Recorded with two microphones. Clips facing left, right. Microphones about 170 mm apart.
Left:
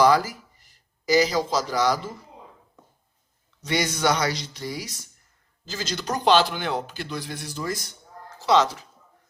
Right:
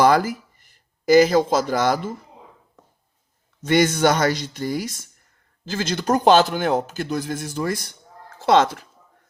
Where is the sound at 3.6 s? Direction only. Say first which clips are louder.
Right 6 dB; 50° right (ahead or behind).